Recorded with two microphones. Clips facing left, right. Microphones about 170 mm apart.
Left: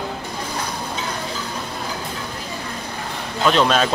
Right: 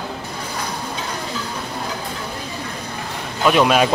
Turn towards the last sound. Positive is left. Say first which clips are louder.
# right 2 dB
turn(degrees=-10)  # may be behind; listen again after turning